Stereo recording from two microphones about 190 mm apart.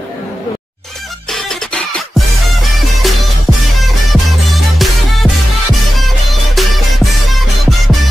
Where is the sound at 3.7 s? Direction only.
Centre (ahead or behind).